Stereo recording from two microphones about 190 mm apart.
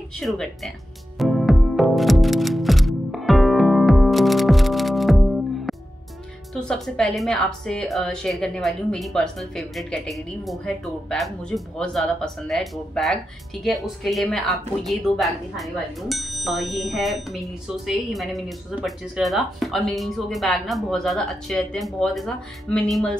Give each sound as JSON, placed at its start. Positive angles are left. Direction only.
{"t": 0.2, "sound": "music", "side_deg": 0}
{"t": 6.5, "sound": "a woman's voice", "side_deg": 5}